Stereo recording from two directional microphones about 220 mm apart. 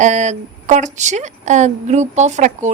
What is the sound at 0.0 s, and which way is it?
Speech, 35° right (ahead or behind).